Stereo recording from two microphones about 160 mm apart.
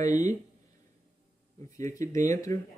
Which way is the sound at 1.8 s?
20° left (ahead or behind).